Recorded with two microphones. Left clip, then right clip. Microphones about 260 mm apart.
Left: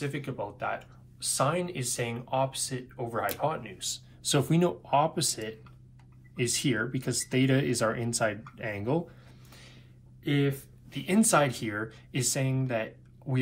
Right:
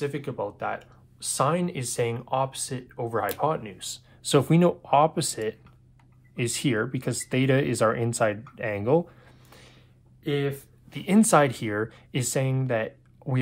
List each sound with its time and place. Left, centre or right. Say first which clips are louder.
0.0 s speech: right 5 dB; right
10.2 s speech: right 2 dB; right